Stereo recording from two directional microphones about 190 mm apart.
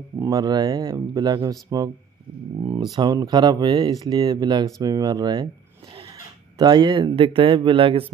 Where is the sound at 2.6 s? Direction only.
25° right (ahead or behind).